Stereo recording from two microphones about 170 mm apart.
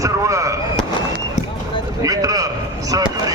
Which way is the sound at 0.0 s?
20° right (ahead or behind).